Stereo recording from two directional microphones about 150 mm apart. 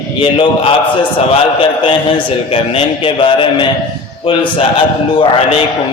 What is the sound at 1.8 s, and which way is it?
A man's voice, 35° left (ahead or behind).